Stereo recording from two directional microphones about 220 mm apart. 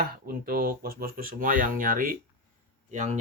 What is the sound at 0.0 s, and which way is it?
Speech, 40° right (ahead or behind).